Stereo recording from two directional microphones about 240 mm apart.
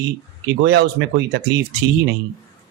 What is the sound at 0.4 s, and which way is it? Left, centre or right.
Speech, right.